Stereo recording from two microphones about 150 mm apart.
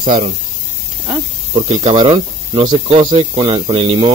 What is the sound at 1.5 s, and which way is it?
Speech, 45° right (ahead or behind).